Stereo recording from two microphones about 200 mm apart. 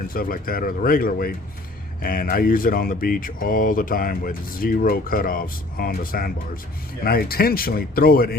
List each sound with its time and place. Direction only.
0.1 s speech: 45° left (ahead or behind)